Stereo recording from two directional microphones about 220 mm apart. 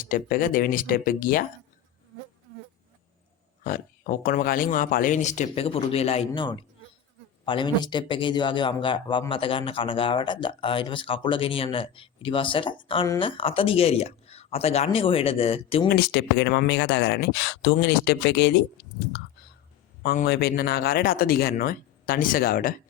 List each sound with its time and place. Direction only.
0.0 s speech: 40° left (ahead or behind)
3.6 s a man's voice: 40° left (ahead or behind)
15.9 s speech: 50° left (ahead or behind)
20.0 s speech: 45° left (ahead or behind)